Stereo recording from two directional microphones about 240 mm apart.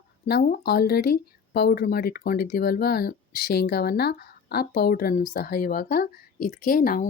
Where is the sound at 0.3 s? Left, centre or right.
Left.